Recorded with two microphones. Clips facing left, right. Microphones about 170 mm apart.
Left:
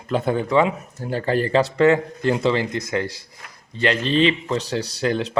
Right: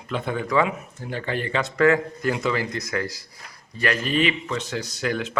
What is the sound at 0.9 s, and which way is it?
Speech, 40° left (ahead or behind).